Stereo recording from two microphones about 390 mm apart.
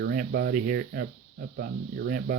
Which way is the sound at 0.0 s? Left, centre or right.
Right.